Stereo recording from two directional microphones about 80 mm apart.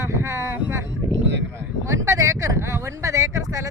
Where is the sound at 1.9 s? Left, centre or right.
Right.